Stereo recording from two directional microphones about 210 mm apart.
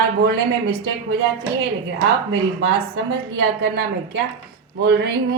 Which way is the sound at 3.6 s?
50° right (ahead or behind).